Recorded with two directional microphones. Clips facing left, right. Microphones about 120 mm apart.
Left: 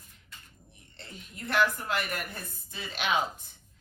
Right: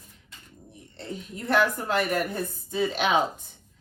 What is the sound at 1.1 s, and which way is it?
Speech, 35° right (ahead or behind).